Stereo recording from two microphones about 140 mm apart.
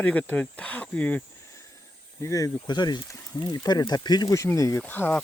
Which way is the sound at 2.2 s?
25° left (ahead or behind).